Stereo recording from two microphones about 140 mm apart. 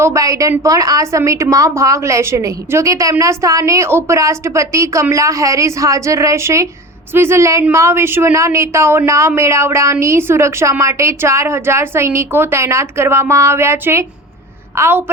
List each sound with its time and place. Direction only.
0.0 s a woman's voice: 20° right (ahead or behind)